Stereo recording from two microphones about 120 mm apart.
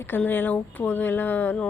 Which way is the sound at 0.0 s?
15° left (ahead or behind).